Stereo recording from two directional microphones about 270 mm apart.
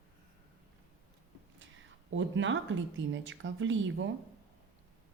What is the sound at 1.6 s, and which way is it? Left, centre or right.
Speech, right.